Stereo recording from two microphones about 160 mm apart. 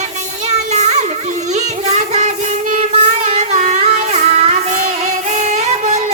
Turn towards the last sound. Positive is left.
turn(degrees=-45)  # may be behind; listen again after turning